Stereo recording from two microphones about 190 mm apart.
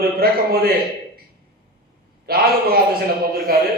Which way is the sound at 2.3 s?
55° right (ahead or behind).